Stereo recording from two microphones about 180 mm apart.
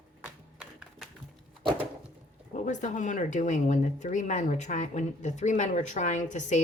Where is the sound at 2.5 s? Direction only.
40° left (ahead or behind).